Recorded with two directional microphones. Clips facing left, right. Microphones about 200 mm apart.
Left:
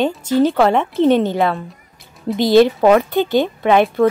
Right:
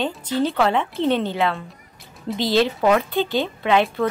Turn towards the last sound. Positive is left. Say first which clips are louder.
# left 6 dB
turn(degrees=50)  # may be behind; listen again after turning